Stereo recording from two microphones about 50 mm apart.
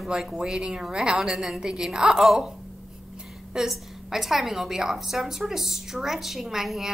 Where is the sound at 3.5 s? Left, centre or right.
Centre.